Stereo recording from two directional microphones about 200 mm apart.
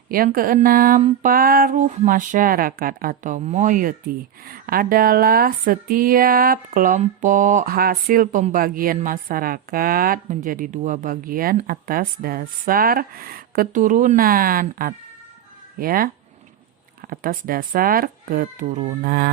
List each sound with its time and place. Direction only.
0.1 s speech: 45° right (ahead or behind)
17.1 s speech: 45° right (ahead or behind)